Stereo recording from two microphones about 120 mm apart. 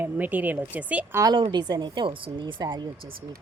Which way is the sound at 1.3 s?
40° right (ahead or behind).